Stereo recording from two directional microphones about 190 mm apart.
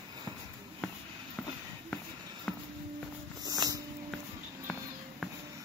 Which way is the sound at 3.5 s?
20° right (ahead or behind).